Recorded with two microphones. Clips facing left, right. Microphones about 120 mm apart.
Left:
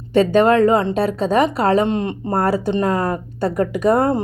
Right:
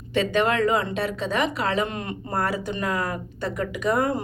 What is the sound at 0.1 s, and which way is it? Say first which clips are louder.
Speech: left 9 dB; 40° left (ahead or behind).